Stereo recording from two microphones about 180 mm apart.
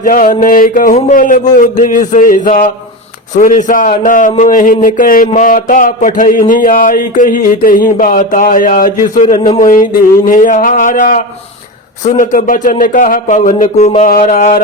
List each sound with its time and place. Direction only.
0.0 s a man's voice: 50° left (ahead or behind)